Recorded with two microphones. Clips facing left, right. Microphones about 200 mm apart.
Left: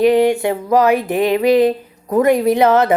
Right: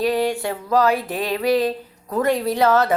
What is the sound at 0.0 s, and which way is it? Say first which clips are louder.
Speech: left 8 dB; 20° left (ahead or behind).